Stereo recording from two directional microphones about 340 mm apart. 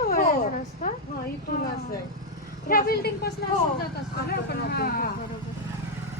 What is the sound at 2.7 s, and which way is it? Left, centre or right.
Speech, left.